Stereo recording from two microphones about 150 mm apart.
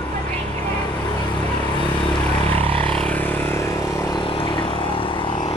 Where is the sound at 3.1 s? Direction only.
15° left (ahead or behind).